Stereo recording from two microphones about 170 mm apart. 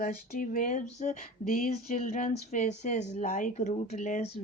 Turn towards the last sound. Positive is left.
turn(degrees=45)  # may be behind; listen again after turning